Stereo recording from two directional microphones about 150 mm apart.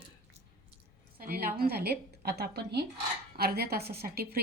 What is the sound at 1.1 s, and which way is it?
A woman's voice, 90° right.